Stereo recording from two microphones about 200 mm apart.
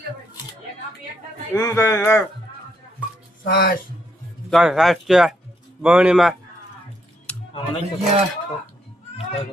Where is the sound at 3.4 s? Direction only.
50° left (ahead or behind).